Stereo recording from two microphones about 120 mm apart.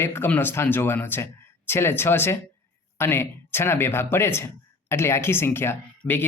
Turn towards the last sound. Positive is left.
turn(degrees=20)  # may be behind; listen again after turning